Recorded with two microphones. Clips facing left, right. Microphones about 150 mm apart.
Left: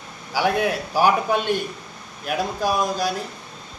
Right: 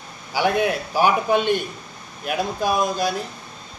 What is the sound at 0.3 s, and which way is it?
Speech, centre (ahead or behind).